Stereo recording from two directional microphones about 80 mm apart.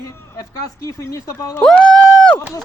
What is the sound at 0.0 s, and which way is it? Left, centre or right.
Speech, left.